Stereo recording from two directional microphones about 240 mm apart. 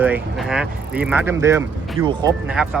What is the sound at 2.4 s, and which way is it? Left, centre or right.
Speech, centre.